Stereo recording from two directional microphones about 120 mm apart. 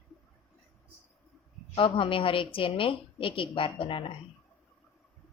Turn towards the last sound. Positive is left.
turn(degrees=45)  # may be behind; listen again after turning